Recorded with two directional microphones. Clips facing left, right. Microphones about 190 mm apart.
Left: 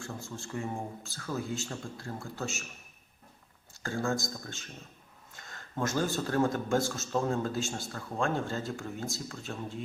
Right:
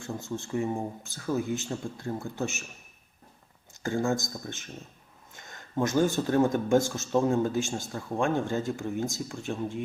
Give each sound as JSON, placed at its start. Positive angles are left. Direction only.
{"t": 0.0, "sound": "speech", "side_deg": -20}
{"t": 3.8, "sound": "speech", "side_deg": -20}